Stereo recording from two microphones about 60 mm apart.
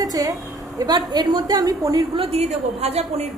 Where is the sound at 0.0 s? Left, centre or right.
Right.